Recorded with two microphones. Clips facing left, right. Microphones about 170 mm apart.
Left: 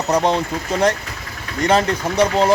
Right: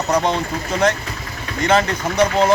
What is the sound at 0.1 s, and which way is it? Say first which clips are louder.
A man's voice: left 2 dB; 35° left (ahead or behind).